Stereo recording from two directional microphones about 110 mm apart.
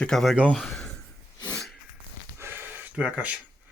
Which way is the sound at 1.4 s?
15° left (ahead or behind).